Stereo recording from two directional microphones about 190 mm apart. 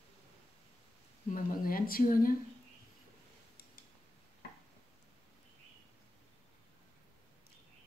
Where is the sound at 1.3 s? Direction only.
50° left (ahead or behind).